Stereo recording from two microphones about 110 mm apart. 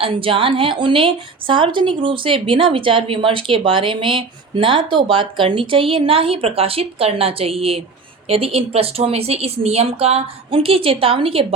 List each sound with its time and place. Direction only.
0.0 s a woman's voice: 55° right (ahead or behind)